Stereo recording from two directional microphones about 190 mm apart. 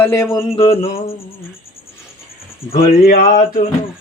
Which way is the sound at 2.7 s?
50° left (ahead or behind).